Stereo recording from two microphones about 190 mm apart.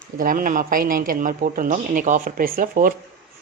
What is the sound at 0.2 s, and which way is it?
Speech, 45° right (ahead or behind).